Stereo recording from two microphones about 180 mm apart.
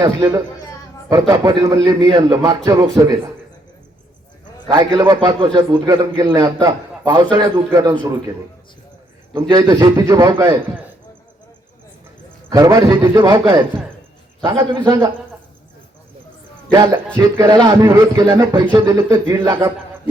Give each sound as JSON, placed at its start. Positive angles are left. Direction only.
{"t": 0.0, "sound": "a man's voice", "side_deg": -20}
{"t": 4.7, "sound": "a man's voice", "side_deg": -25}
{"t": 9.3, "sound": "a man's voice", "side_deg": -25}
{"t": 12.5, "sound": "a man's voice", "side_deg": -20}
{"t": 14.4, "sound": "a man's voice", "side_deg": -25}
{"t": 17.2, "sound": "a man's voice", "side_deg": -20}